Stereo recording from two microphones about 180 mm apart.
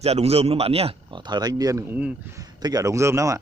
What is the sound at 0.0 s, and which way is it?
Speech, 35° right (ahead or behind).